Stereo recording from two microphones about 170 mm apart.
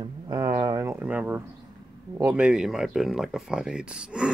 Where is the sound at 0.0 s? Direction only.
25° right (ahead or behind); by 1.4 s 10° right (ahead or behind).